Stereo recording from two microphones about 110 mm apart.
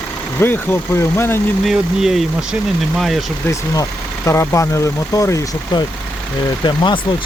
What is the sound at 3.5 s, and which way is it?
Speech, 25° left (ahead or behind).